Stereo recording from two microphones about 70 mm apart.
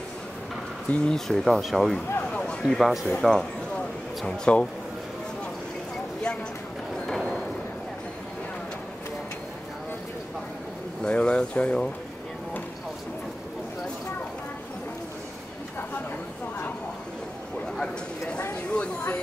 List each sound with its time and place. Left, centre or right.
0.9 s speech: centre
2.3 s a sound: centre
2.8 s speech: centre
3.2 s speech: centre
4.5 s speech: centre
7.1 s a sound: centre
11.0 s speech: centre
18.7 s speech: centre